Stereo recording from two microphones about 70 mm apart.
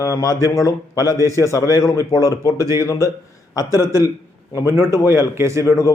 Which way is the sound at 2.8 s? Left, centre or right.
Left.